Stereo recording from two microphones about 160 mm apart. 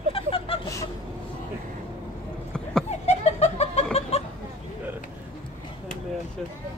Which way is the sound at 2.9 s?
45° left (ahead or behind).